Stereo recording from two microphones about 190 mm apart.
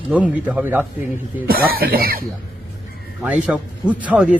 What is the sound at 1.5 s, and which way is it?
Speech, 50° right (ahead or behind).